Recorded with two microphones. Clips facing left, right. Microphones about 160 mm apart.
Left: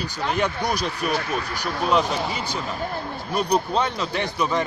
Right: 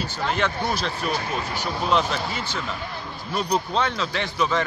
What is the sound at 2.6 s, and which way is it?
Speech, 45° left (ahead or behind).